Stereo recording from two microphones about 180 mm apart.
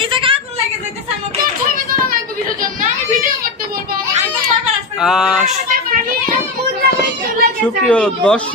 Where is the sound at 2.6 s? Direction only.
50° right (ahead or behind).